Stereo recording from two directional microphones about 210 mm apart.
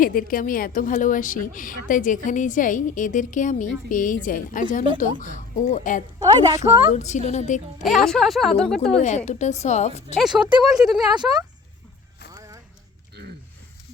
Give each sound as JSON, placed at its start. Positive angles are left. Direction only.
{"t": 0.0, "sound": "a woman's voice", "side_deg": 45}
{"t": 6.1, "sound": "a woman's voice", "side_deg": -15}
{"t": 6.6, "sound": "a woman's voice", "side_deg": 35}
{"t": 7.9, "sound": "speech", "side_deg": 0}
{"t": 8.9, "sound": "a woman's voice", "side_deg": 35}
{"t": 10.2, "sound": "speech", "side_deg": 0}
{"t": 11.1, "sound": "speech", "side_deg": -20}
{"t": 12.3, "sound": "music", "side_deg": -15}